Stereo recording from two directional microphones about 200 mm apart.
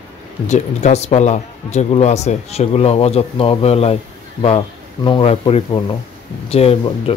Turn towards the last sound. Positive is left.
turn(degrees=30)  # may be behind; listen again after turning